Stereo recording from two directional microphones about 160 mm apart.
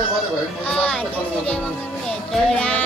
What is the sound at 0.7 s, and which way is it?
Speech, 10° left (ahead or behind).